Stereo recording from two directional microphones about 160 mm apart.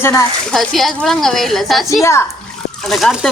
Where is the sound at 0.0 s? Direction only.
15° left (ahead or behind).